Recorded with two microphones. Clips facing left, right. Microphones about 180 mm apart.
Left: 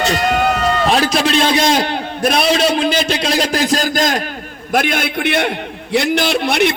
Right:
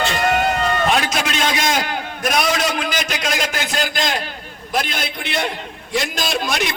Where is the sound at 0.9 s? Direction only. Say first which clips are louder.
Left 5 dB; 35° left (ahead or behind).